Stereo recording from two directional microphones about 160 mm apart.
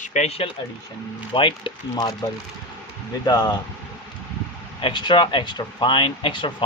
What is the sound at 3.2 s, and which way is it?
Speech, 25° left (ahead or behind).